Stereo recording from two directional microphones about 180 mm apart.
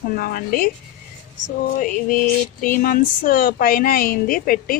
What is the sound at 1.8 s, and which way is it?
Speech, 50° left (ahead or behind).